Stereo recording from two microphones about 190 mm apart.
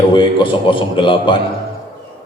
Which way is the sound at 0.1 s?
25° left (ahead or behind).